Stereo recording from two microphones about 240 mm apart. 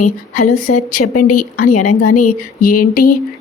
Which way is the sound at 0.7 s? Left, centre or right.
Left.